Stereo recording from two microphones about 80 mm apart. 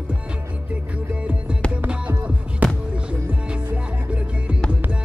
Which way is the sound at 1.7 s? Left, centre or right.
Centre.